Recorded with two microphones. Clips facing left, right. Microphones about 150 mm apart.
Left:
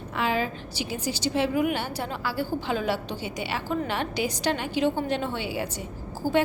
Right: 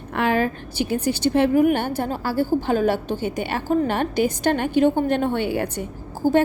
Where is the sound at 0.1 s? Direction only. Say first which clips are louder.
Right 6 dB; 55° right (ahead or behind).